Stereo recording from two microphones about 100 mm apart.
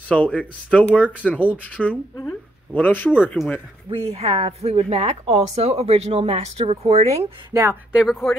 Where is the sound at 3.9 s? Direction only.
80° right.